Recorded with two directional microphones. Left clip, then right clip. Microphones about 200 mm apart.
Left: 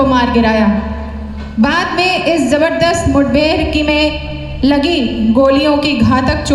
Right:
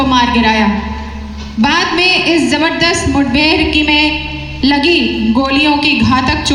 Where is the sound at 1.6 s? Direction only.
55° left (ahead or behind).